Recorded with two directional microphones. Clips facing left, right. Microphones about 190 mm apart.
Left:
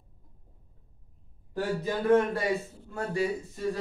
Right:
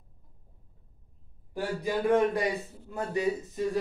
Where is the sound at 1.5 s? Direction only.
15° right (ahead or behind).